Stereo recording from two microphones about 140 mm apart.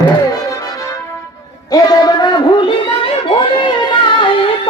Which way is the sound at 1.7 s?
25° left (ahead or behind).